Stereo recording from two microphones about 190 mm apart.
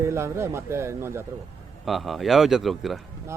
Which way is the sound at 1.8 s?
Centre (ahead or behind).